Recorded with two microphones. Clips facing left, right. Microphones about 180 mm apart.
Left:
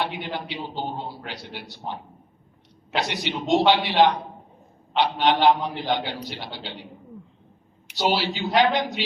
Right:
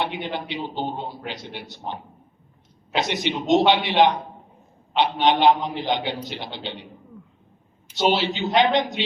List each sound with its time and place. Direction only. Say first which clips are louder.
0.0 s a man's voice: right 2 dB; 20° right (ahead or behind)
8.2 s a man's voice: right 1 dB; 20° right (ahead or behind)